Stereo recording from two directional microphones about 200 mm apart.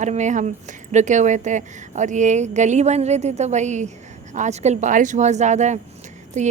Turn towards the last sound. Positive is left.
turn(degrees=-35)  # may be behind; listen again after turning